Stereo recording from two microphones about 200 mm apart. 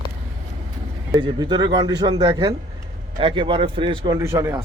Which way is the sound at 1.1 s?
20° right (ahead or behind).